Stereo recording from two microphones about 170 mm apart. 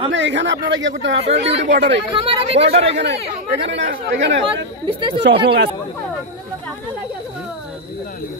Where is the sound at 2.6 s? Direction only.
35° right (ahead or behind).